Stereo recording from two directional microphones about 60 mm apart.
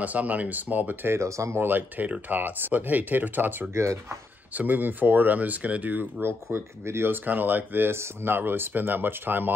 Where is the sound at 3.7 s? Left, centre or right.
Right.